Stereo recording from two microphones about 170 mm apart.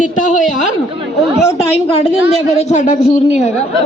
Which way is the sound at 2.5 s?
45° left (ahead or behind).